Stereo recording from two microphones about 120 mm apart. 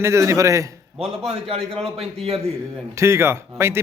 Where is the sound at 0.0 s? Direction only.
25° right (ahead or behind).